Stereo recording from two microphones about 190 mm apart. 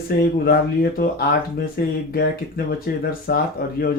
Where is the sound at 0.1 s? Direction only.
50° left (ahead or behind).